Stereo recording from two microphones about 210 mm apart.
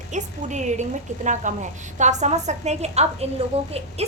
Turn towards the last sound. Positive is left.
turn(degrees=-30)  # may be behind; listen again after turning